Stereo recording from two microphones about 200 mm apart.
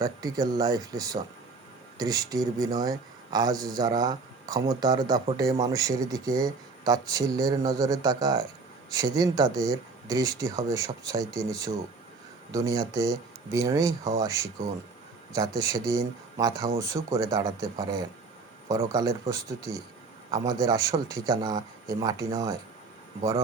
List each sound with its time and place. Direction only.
0.0 s speech: 20° right (ahead or behind)